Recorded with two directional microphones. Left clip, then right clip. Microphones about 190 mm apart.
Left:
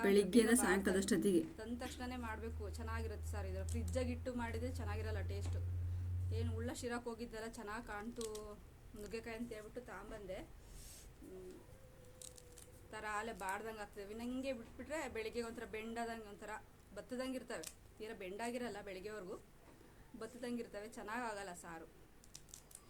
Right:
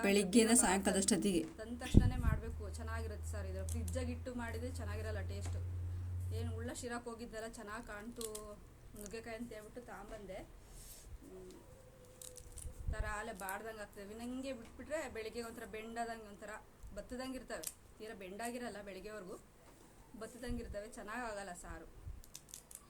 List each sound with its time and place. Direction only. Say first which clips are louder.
0.1 s a woman's voice: right 1 dB; 25° right (ahead or behind)
1.6 s speech: right 8 dB; 5° left (ahead or behind)
9.0 s speech: even; 10° left (ahead or behind)
12.9 s speech: even; 10° left (ahead or behind)